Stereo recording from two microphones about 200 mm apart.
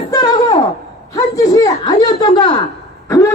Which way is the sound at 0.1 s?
20° left (ahead or behind).